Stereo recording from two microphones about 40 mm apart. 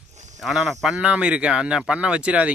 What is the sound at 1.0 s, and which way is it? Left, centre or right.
A man's voice, right.